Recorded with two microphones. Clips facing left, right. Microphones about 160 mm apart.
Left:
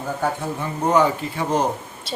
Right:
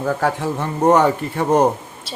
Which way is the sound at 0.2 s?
80° right.